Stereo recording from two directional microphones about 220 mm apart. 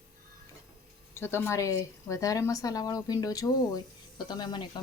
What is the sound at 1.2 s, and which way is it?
A woman's voice, 10° left (ahead or behind).